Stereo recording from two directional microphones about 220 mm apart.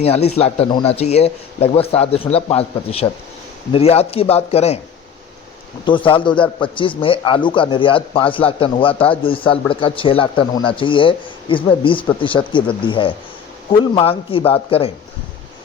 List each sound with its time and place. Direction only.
0.0 s a man's voice: 30° left (ahead or behind)
5.8 s a man's voice: 20° left (ahead or behind)